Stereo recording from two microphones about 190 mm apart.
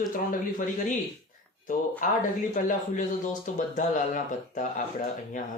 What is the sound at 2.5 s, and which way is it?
A man's voice, 45° left (ahead or behind).